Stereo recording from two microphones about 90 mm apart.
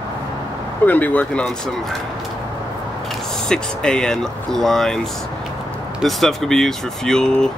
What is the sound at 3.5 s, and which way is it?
Speech, 10° left (ahead or behind).